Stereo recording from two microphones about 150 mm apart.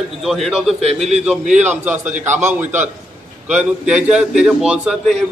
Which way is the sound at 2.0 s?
55° right (ahead or behind).